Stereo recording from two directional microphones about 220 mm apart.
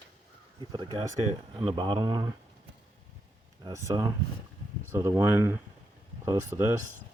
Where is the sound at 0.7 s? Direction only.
20° right (ahead or behind).